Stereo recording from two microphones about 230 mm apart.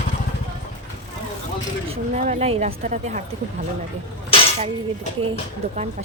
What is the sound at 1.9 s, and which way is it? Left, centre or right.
A woman's voice, right.